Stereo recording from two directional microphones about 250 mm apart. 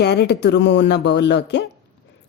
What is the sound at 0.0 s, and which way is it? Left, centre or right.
Speech, left.